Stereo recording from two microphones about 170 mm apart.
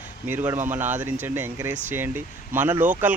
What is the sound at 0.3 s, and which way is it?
Speech, 10° right (ahead or behind).